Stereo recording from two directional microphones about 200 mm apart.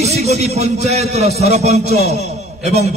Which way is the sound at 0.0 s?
35° right (ahead or behind).